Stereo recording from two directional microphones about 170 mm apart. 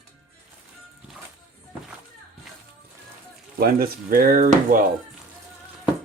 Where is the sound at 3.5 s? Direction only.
60° right (ahead or behind).